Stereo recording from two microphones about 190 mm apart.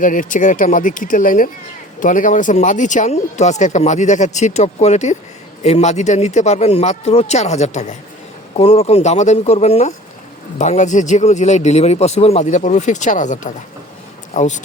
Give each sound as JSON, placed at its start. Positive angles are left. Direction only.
{"t": 0.0, "sound": "speech", "side_deg": 45}